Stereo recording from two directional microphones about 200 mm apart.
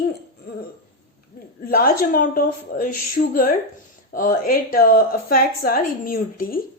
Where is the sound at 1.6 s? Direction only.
50° left (ahead or behind).